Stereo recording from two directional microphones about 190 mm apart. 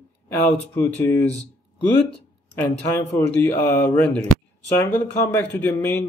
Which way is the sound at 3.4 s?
10° left (ahead or behind).